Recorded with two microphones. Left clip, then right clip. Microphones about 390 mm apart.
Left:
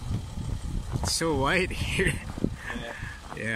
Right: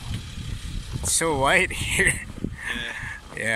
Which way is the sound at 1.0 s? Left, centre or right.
Centre.